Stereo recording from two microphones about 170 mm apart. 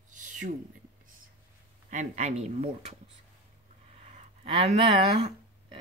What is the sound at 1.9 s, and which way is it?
Speech, 45° right (ahead or behind).